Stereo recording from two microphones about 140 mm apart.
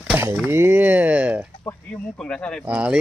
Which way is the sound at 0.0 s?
15° right (ahead or behind).